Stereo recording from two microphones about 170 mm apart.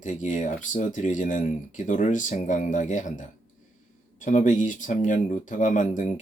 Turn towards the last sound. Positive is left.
turn(degrees=50)  # may be behind; listen again after turning